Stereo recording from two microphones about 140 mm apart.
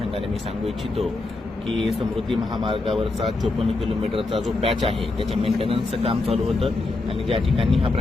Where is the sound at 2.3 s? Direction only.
35° right (ahead or behind).